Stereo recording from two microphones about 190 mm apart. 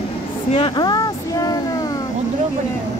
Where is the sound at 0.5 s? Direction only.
25° left (ahead or behind).